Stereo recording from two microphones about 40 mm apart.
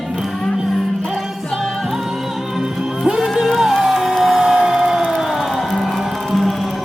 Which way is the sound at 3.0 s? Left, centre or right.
Centre.